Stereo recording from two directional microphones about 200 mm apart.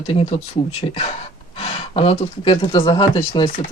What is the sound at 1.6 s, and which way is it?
Speech, 30° left (ahead or behind).